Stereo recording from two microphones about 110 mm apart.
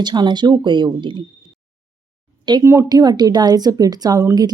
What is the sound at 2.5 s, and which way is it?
Speech, 45° right (ahead or behind).